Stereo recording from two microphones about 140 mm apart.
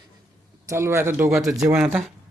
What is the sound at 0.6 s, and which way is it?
Speech, 20° right (ahead or behind).